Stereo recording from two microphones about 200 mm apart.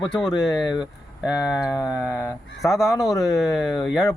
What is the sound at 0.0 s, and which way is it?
Speech, centre (ahead or behind).